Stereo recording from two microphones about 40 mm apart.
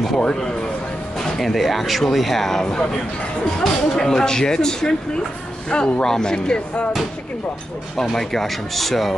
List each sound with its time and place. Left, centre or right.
0.2 s speech: centre
1.4 s speech: centre
8.0 s speech: centre